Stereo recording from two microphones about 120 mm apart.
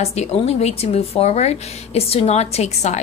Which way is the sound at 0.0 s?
65° left (ahead or behind).